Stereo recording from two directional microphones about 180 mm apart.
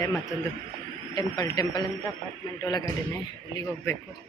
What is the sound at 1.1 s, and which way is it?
Speech, 20° left (ahead or behind).